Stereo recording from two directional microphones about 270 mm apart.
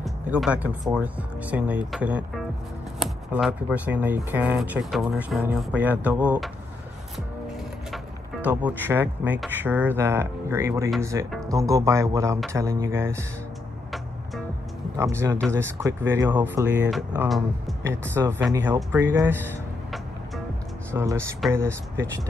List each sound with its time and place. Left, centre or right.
0.0 s speech: centre
7.9 s speech: centre
15.0 s speech: centre